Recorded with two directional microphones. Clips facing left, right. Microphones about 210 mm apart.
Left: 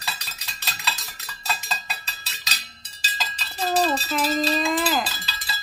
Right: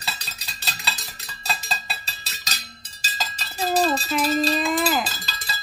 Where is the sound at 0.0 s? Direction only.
30° right (ahead or behind).